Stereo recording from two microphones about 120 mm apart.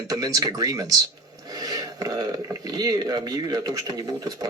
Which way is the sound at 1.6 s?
30° right (ahead or behind).